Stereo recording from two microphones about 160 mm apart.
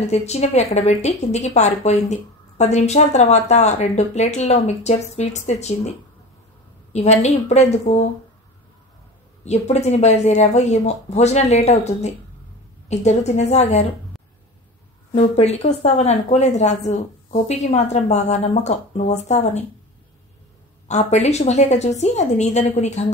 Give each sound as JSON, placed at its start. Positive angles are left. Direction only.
{"t": 0.0, "sound": "a woman's voice", "side_deg": 40}
{"t": 9.4, "sound": "a woman's voice", "side_deg": 45}
{"t": 15.1, "sound": "a woman's voice", "side_deg": 40}
{"t": 20.9, "sound": "a woman's voice", "side_deg": 45}